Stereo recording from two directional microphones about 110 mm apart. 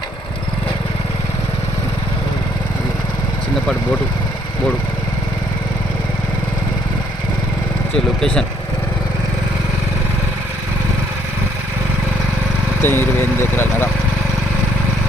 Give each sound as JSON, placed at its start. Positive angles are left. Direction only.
{"t": 7.9, "sound": "speech", "side_deg": 5}
{"t": 12.8, "sound": "speech", "side_deg": 20}